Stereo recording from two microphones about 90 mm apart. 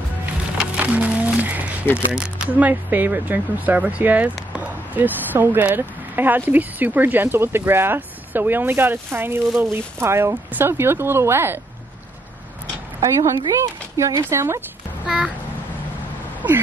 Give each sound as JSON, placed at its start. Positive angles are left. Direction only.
{"t": 0.7, "sound": "music", "side_deg": -15}
{"t": 2.0, "sound": "speech", "side_deg": -10}
{"t": 13.0, "sound": "speech", "side_deg": -35}
{"t": 15.0, "sound": "a sound", "side_deg": -10}